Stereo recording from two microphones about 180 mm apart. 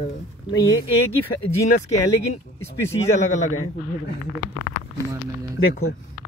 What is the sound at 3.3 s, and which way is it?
Speech, 40° left (ahead or behind).